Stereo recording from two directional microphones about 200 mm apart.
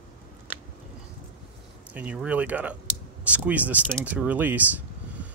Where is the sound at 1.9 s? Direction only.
5° right (ahead or behind).